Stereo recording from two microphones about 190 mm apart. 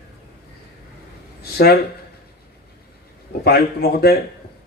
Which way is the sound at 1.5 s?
55° left (ahead or behind).